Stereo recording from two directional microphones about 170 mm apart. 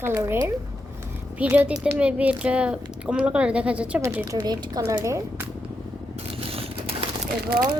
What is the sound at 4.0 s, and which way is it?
Speech, 15° right (ahead or behind).